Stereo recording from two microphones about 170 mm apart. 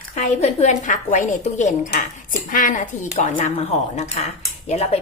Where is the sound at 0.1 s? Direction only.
45° left (ahead or behind).